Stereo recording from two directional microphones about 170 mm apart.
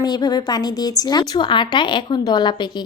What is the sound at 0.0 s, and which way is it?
Speech, 25° left (ahead or behind).